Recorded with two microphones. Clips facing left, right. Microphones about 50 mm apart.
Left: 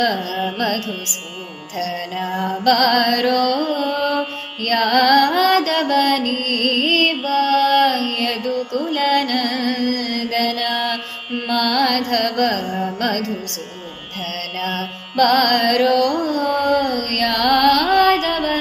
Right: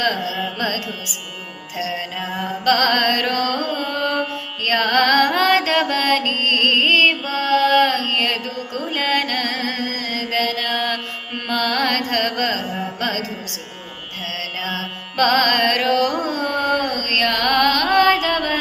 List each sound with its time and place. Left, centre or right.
0.0 s music: right
1.7 s music: right
4.6 s mantra: right
7.3 s music: right
8.9 s mantra: right
12.1 s carnatic music: right
13.0 s music: right
14.6 s carnatic music: right